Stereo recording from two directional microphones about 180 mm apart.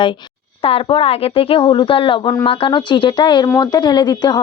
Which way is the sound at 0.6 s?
30° left (ahead or behind).